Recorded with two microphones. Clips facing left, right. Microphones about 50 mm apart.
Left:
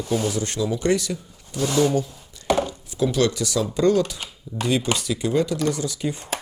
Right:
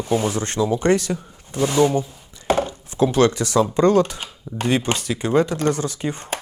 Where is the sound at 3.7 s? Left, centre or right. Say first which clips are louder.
Right 1 dB; right.